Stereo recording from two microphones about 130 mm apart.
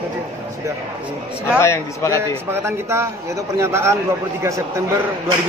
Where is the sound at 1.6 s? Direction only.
20° left (ahead or behind).